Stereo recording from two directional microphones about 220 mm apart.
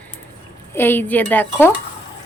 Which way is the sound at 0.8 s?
10° left (ahead or behind).